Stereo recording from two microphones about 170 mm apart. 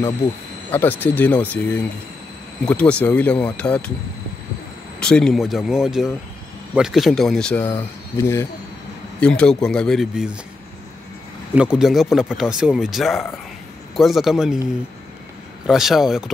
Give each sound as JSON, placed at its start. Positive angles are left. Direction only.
{"t": 0.7, "sound": "speech", "side_deg": 10}
{"t": 5.0, "sound": "speech", "side_deg": 5}
{"t": 7.7, "sound": "speech", "side_deg": 15}
{"t": 11.8, "sound": "speech", "side_deg": 0}
{"t": 15.6, "sound": "speech", "side_deg": 0}